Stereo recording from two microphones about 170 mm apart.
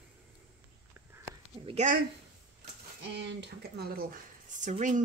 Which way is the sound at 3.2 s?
90° right.